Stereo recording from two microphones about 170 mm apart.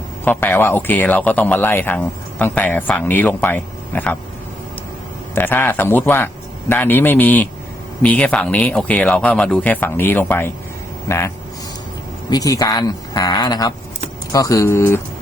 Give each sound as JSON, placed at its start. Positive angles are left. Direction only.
{"t": 0.3, "sound": "speech", "side_deg": 10}
{"t": 5.3, "sound": "speech", "side_deg": 10}
{"t": 12.3, "sound": "speech", "side_deg": 20}